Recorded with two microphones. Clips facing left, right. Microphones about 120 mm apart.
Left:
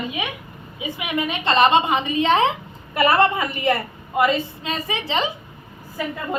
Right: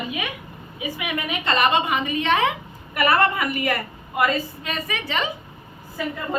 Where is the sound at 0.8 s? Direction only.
25° left (ahead or behind).